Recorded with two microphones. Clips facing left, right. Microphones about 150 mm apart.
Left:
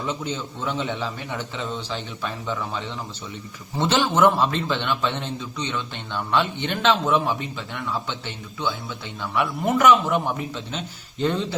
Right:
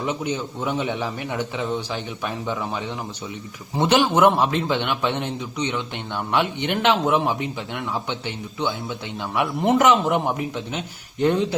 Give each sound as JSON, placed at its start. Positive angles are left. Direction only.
{"t": 0.0, "sound": "a man's voice", "side_deg": -15}
{"t": 9.2, "sound": "a man's voice", "side_deg": -15}